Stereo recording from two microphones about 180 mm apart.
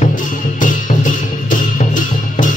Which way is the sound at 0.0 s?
45° left (ahead or behind).